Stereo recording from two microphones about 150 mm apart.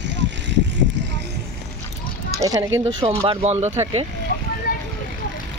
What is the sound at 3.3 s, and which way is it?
Speech, 45° right (ahead or behind).